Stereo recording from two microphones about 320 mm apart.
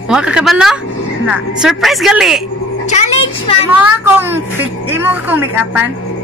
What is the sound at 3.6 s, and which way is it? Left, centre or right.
A woman's voice, centre.